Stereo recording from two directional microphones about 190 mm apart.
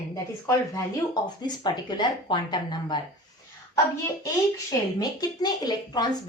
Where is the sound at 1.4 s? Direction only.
20° left (ahead or behind).